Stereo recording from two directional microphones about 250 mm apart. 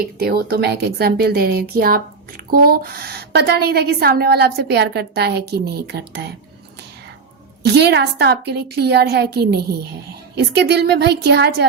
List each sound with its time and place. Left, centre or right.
0.0 s a woman's voice: right
7.6 s a woman's voice: right